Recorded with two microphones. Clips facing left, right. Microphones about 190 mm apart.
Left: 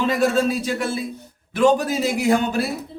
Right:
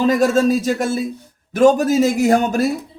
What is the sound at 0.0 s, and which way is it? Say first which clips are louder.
A man's voice: right 4 dB; 40° right (ahead or behind).